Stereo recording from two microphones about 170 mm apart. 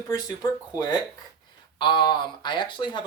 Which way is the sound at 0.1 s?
20° left (ahead or behind).